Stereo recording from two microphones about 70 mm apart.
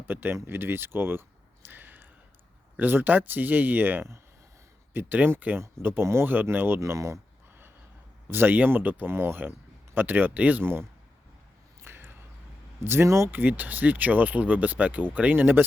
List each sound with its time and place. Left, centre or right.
0.1 s speech: right
1.6 s a sound: right
2.7 s speech: right
6.7 s speech: right
8.3 s speech: right
11.8 s a sound: right
12.8 s speech: right
13.3 s speech: right